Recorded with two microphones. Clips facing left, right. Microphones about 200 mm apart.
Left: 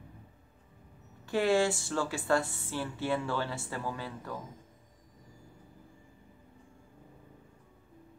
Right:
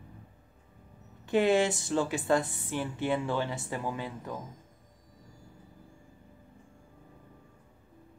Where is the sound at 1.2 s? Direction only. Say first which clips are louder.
Right 2 dB; 20° right (ahead or behind).